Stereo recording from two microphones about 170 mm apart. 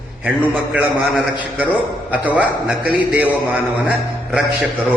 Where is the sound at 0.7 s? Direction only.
10° right (ahead or behind).